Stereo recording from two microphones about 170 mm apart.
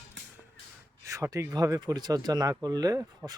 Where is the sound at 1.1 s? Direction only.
20° right (ahead or behind).